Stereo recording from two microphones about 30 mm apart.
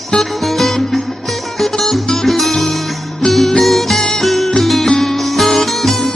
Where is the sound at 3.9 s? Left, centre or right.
Left.